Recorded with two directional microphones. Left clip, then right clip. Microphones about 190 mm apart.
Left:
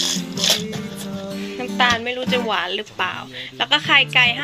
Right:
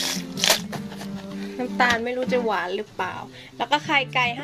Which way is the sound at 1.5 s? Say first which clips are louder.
Left 3 dB; 15° right (ahead or behind).